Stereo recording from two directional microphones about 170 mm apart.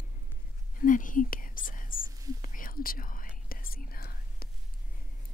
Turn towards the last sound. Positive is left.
turn(degrees=60)  # may be behind; listen again after turning